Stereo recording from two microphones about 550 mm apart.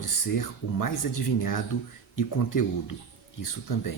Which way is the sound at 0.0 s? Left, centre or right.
Left.